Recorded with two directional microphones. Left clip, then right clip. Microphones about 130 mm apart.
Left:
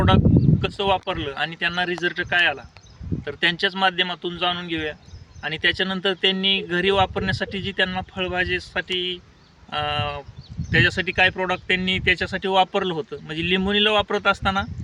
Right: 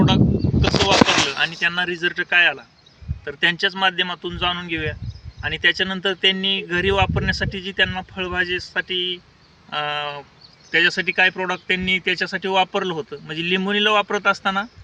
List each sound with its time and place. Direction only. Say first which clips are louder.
0.9 s speech: right 7 dB; 30° left (ahead or behind)